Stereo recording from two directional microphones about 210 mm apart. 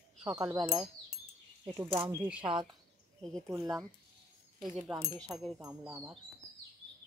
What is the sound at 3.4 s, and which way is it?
Wind chime, 15° right (ahead or behind).